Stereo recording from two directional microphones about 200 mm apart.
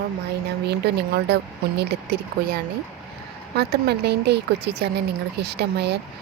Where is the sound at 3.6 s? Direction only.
55° right (ahead or behind).